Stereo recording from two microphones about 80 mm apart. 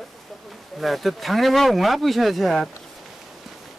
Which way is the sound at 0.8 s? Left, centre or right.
Centre.